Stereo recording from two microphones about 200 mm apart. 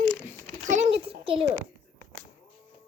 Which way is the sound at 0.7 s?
30° right (ahead or behind).